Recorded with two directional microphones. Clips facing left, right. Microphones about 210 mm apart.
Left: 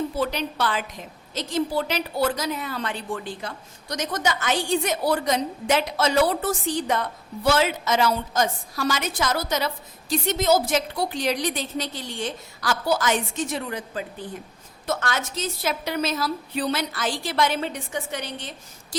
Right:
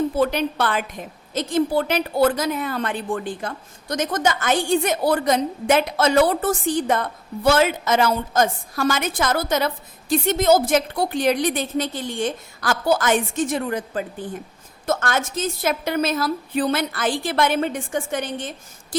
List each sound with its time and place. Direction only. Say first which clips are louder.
0.2 s a woman's voice: right 5 dB; 55° right (ahead or behind)